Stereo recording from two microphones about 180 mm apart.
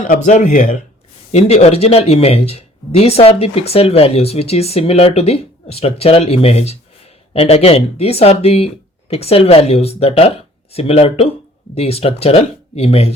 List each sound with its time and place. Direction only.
0.0 s speech: 45° left (ahead or behind)